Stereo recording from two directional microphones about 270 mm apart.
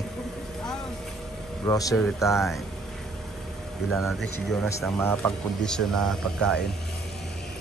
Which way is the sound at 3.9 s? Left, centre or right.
Centre.